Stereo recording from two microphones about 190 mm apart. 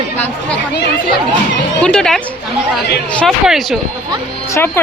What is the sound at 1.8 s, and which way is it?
Speech, 5° left (ahead or behind).